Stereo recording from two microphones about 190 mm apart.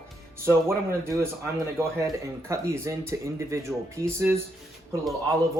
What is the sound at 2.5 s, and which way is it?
Speech, 15° right (ahead or behind).